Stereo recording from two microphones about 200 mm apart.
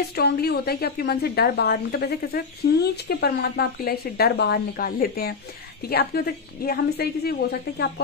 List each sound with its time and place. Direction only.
0.1 s speech: 55° left (ahead or behind)